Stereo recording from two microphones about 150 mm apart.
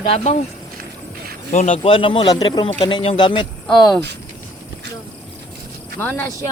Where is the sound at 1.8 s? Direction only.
35° left (ahead or behind).